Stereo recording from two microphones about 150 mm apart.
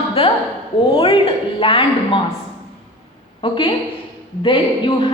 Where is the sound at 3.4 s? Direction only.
35° left (ahead or behind).